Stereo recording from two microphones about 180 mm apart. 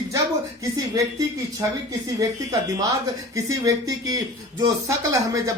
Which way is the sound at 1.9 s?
20° right (ahead or behind).